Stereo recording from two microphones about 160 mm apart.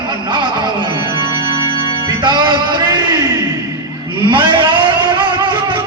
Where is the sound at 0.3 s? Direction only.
30° right (ahead or behind).